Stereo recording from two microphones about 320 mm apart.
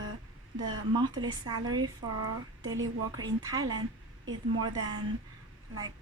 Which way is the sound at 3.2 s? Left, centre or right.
Centre.